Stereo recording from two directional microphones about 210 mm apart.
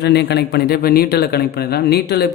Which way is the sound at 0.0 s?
50° left (ahead or behind).